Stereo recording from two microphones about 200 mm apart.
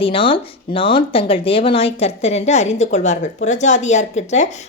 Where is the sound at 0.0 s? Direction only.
25° left (ahead or behind).